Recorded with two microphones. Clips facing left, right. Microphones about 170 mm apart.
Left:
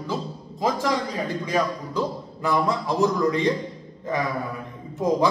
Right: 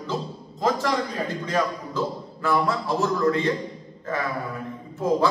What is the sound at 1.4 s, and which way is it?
A man's voice, 15° left (ahead or behind).